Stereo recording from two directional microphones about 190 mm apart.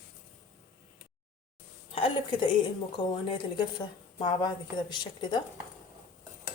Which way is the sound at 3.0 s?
20° left (ahead or behind).